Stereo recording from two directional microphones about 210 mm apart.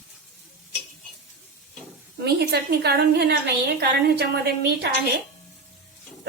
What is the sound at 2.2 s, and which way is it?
A woman's voice, 50° right (ahead or behind).